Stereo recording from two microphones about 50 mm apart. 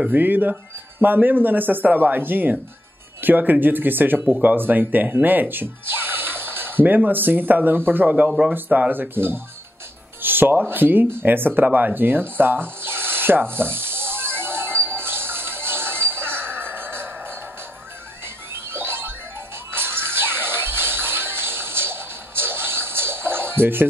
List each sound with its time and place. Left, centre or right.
0.1 s speech: right
8.5 s speech: right
9.1 s speech: right
10.7 s a sound: right
18.2 s music: right